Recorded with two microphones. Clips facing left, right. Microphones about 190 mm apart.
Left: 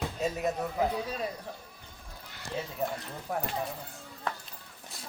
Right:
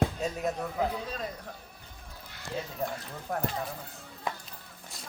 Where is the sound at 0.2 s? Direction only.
Centre (ahead or behind).